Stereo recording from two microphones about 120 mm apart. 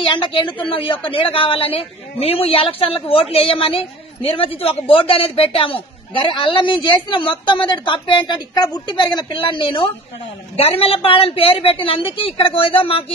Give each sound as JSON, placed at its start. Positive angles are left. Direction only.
{"t": 0.1, "sound": "a man's voice", "side_deg": 45}
{"t": 10.5, "sound": "a man's voice", "side_deg": 55}